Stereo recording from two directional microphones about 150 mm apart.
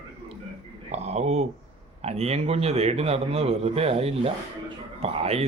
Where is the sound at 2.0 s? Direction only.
45° right (ahead or behind).